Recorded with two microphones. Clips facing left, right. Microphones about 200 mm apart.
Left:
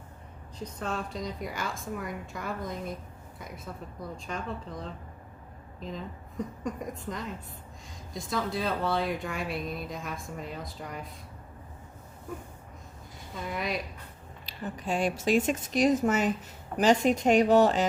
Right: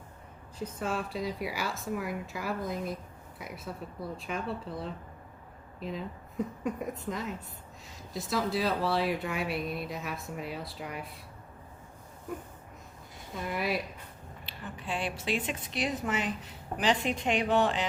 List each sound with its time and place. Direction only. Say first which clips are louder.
0.6 s speech: right 1 dB; 5° right (ahead or behind)
6.7 s speech: right 1 dB; 5° right (ahead or behind)
13.3 s speech: right 1 dB; 5° right (ahead or behind)
14.4 s a woman's voice: left 6 dB; 40° left (ahead or behind)